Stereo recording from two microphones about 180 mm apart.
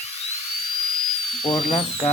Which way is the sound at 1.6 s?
35° left (ahead or behind).